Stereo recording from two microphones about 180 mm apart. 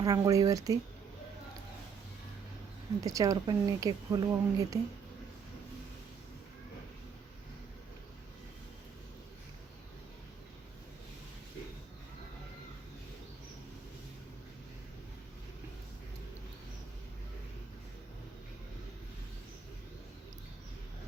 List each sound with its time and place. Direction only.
0.0 s speech: 20° right (ahead or behind)
3.0 s a woman's voice: 20° right (ahead or behind)